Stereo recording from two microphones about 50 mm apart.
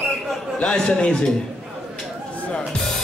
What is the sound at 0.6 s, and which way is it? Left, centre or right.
Speech, centre.